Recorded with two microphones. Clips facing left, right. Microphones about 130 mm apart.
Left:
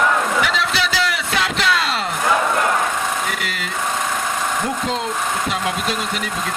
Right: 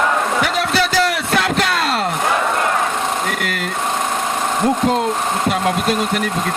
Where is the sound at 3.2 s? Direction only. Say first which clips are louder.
Right 4 dB; 50° right (ahead or behind).